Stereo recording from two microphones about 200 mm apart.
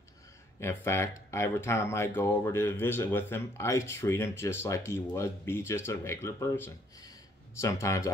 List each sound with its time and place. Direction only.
0.6 s speech: 15° left (ahead or behind)